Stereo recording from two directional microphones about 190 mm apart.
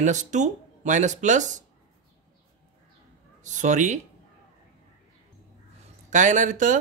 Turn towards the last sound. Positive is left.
turn(degrees=-40)  # may be behind; listen again after turning